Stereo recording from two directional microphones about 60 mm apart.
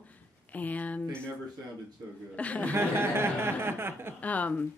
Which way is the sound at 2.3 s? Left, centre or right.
Left.